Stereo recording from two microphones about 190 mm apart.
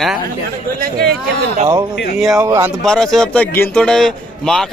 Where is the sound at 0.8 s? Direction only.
55° right (ahead or behind).